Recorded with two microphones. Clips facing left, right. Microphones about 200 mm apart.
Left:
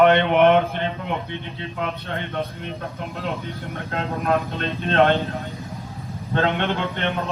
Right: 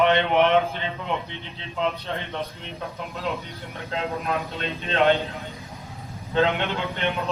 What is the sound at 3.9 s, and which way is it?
Speech, 50° left (ahead or behind).